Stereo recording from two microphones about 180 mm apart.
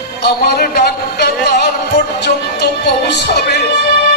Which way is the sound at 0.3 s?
60° left (ahead or behind).